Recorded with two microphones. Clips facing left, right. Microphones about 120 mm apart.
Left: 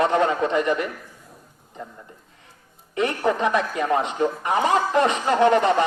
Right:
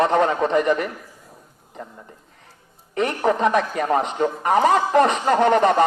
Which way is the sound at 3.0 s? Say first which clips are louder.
Right 2 dB; 45° right (ahead or behind).